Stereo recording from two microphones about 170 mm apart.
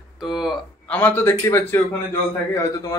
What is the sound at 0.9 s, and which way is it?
Speech, 10° left (ahead or behind).